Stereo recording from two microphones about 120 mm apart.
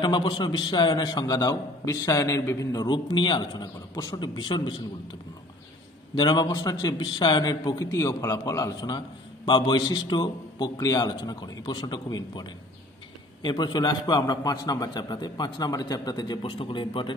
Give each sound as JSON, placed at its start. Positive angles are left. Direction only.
{"t": 0.0, "sound": "a man's voice", "side_deg": 40}
{"t": 6.1, "sound": "a man's voice", "side_deg": 35}